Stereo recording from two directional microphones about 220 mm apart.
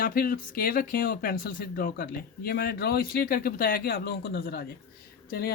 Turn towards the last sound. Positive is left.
turn(degrees=45)  # may be behind; listen again after turning